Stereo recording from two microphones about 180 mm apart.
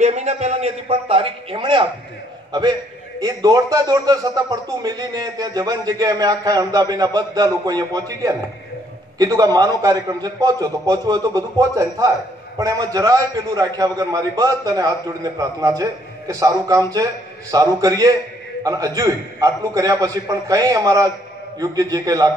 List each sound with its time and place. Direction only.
0.0 s a man's voice: 40° right (ahead or behind)
3.2 s speech: 20° right (ahead or behind)